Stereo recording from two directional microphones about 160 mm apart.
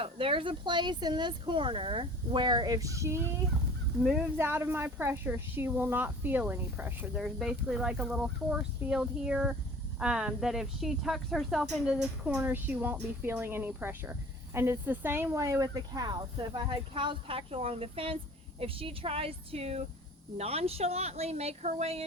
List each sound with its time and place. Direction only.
0.0 s speech: 35° right (ahead or behind)
4.0 s speech: 10° right (ahead or behind); by 22.0 s 40° right (ahead or behind)